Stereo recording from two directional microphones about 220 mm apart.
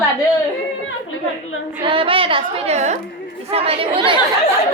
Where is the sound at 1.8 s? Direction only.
25° right (ahead or behind).